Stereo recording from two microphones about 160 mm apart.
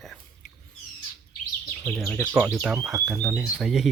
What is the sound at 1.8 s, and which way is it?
Speech, 5° left (ahead or behind).